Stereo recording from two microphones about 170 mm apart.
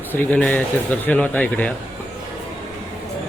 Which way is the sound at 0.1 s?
10° left (ahead or behind).